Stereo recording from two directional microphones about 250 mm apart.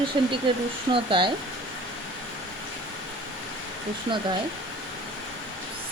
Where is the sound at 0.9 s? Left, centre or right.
Right.